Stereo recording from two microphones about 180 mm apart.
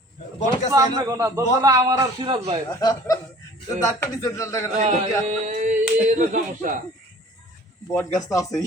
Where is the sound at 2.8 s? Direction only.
20° left (ahead or behind).